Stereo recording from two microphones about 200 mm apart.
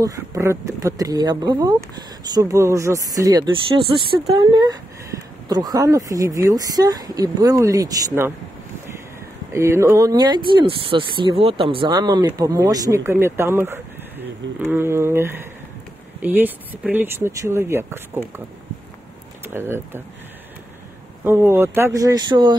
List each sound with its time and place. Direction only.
0.0 s speech: 15° right (ahead or behind)
9.5 s speech: 15° right (ahead or behind)
19.4 s speech: 10° right (ahead or behind)
21.2 s speech: 10° right (ahead or behind)